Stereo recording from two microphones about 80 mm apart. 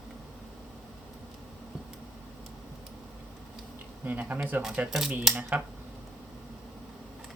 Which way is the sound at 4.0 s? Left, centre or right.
Right.